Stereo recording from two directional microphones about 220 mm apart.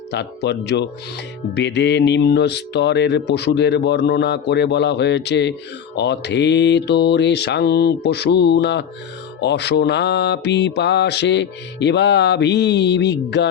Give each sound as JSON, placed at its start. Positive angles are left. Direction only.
{"t": 0.1, "sound": "mantra", "side_deg": 50}